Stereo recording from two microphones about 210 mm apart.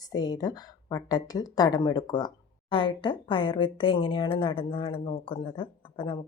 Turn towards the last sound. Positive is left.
turn(degrees=25)  # may be behind; listen again after turning